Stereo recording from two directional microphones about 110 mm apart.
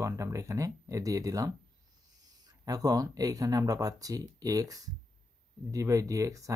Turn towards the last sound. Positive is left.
turn(degrees=-30)  # may be behind; listen again after turning